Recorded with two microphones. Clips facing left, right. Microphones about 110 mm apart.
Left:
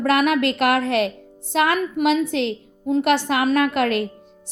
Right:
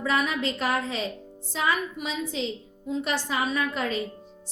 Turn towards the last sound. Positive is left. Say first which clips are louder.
# left 9 dB
turn(degrees=70)  # may be behind; listen again after turning